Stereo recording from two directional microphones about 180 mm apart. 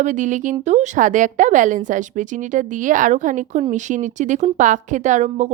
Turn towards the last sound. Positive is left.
turn(degrees=-40)  # may be behind; listen again after turning